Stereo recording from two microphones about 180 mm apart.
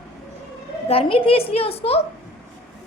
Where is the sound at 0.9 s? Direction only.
30° left (ahead or behind).